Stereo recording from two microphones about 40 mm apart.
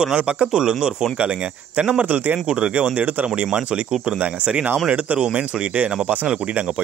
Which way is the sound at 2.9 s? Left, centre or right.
Right.